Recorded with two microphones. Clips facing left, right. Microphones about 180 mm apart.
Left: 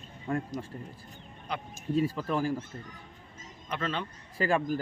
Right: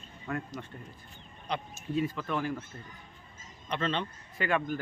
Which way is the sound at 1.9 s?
35° left (ahead or behind).